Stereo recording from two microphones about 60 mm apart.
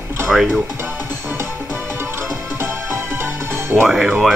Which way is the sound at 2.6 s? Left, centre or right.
Right.